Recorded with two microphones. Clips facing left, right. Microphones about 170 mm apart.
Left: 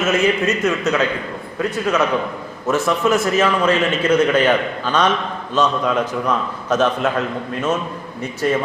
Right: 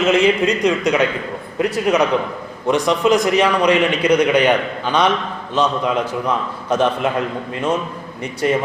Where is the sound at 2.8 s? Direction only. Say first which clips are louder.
Right 3 dB; 15° right (ahead or behind).